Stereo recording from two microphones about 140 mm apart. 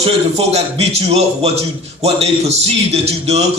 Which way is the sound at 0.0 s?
45° right (ahead or behind).